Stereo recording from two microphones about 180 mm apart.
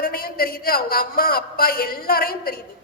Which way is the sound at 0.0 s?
55° left (ahead or behind).